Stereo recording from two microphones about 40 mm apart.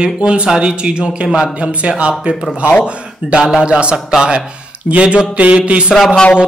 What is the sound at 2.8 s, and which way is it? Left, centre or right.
Speech, right.